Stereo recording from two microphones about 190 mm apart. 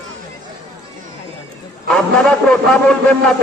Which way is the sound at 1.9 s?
5° left (ahead or behind).